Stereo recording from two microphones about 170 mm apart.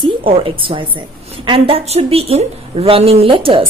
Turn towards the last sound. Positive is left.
turn(degrees=-30)  # may be behind; listen again after turning